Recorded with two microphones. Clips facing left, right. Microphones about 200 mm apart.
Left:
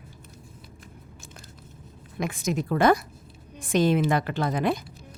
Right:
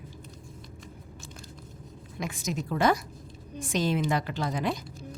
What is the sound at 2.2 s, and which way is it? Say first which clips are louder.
A woman's voice: left 5 dB; 55° left (ahead or behind).